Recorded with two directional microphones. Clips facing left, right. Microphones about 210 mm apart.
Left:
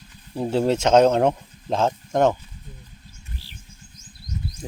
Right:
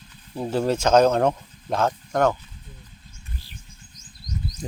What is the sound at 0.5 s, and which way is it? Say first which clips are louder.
Speech: left 1 dB; 25° left (ahead or behind).